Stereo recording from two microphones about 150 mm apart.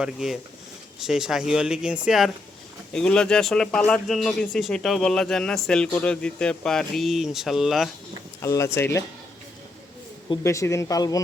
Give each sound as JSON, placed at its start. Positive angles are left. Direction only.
{"t": 0.0, "sound": "speech", "side_deg": -5}
{"t": 8.4, "sound": "speech", "side_deg": 20}
{"t": 10.4, "sound": "speech", "side_deg": 20}